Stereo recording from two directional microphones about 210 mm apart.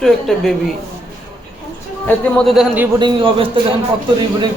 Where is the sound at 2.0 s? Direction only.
Centre (ahead or behind).